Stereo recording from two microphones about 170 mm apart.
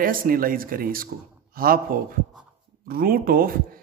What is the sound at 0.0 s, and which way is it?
Speech, 55° right (ahead or behind).